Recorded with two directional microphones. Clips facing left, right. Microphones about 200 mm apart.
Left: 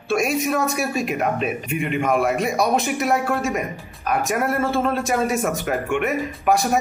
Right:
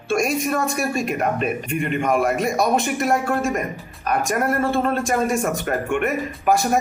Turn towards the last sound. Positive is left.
turn(degrees=0)  # may be behind; listen again after turning